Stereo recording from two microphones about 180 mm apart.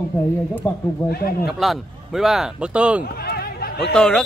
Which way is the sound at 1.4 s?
Centre (ahead or behind).